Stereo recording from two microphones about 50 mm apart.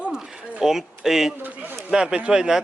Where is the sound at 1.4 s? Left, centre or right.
Right.